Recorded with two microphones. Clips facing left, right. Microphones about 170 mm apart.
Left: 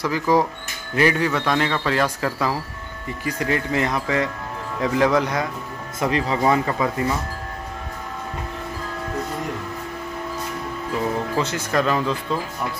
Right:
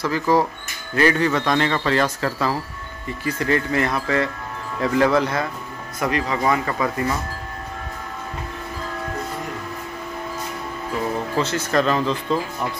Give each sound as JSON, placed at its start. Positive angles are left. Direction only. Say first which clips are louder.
{"t": 0.0, "sound": "speech", "louder": "even", "side_deg": 15}
{"t": 5.9, "sound": "speech", "louder": "left 1 dB", "side_deg": 25}
{"t": 11.3, "sound": "speech", "louder": "right 4 dB", "side_deg": 15}